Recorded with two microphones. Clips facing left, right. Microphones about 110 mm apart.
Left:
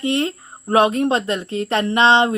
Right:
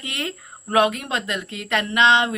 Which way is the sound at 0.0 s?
30° left (ahead or behind).